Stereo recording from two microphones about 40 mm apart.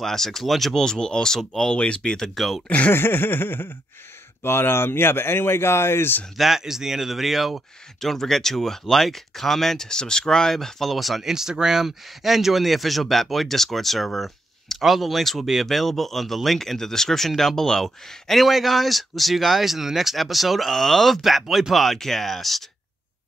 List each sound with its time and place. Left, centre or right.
0.0 s speech: centre
0.7 s speech: centre
1.7 s speech: left
2.1 s speech: centre
2.9 s a sound: left
4.4 s speech: left
6.3 s speech: centre
8.0 s speech: centre